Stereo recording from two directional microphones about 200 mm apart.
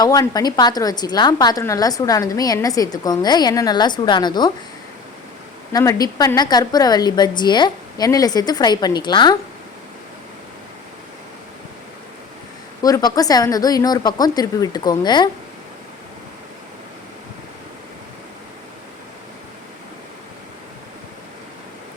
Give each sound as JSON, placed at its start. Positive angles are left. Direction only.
{"t": 0.0, "sound": "a woman's voice", "side_deg": 20}
{"t": 5.7, "sound": "a woman's voice", "side_deg": 15}
{"t": 12.8, "sound": "a woman's voice", "side_deg": 20}